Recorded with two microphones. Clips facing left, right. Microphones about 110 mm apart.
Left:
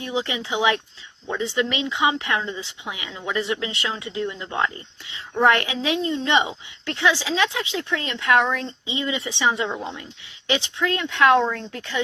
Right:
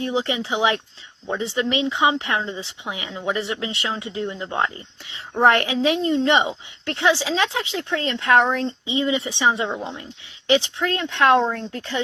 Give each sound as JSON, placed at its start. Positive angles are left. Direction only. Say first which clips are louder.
{"t": 0.0, "sound": "a woman's voice", "louder": "right 3 dB", "side_deg": -30}